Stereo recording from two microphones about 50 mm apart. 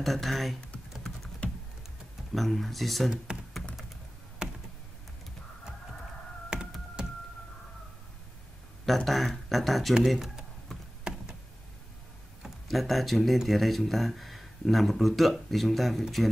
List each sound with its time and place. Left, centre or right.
0.0 s speech: centre
2.3 s speech: centre
3.3 s typing: centre
4.4 s computer keyboard: centre
6.5 s a sound: centre
7.0 s power windows: centre
8.8 s speech: centre
10.7 s a sound: centre
12.6 s speech: centre